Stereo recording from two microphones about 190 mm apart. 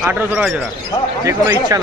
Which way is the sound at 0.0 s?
10° right (ahead or behind).